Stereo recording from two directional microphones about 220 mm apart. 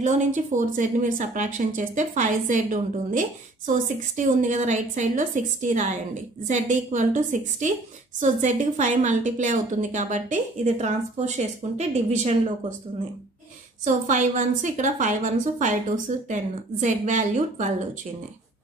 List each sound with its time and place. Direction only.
0.0 s a woman's voice: 35° right (ahead or behind)
13.8 s a woman's voice: 35° right (ahead or behind)